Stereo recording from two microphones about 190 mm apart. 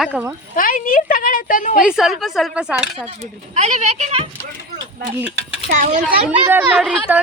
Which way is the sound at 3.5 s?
35° right (ahead or behind).